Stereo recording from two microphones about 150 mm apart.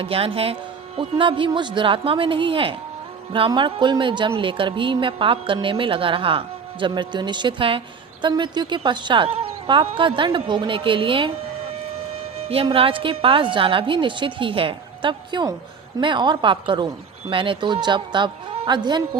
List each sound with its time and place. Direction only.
0.0 s a woman's voice: 40° right (ahead or behind)
12.4 s music: 40° right (ahead or behind)
12.6 s a woman's voice: 35° right (ahead or behind)